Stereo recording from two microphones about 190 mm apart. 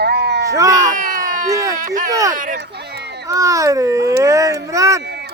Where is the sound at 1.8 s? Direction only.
45° right (ahead or behind).